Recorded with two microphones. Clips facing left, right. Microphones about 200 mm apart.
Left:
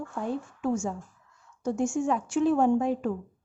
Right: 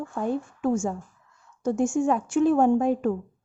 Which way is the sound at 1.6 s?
50° right (ahead or behind).